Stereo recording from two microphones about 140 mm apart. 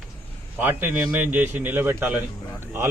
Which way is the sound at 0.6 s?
15° right (ahead or behind).